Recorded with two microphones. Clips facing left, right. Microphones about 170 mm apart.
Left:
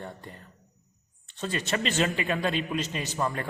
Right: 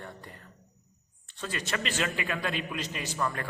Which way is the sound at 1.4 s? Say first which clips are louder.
Left 4 dB; 25° left (ahead or behind).